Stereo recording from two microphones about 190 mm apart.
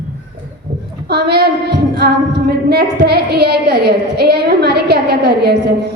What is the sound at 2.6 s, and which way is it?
A woman's voice, 55° right (ahead or behind).